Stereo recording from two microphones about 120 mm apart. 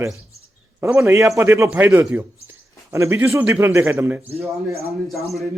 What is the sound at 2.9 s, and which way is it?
Speech, 25° right (ahead or behind).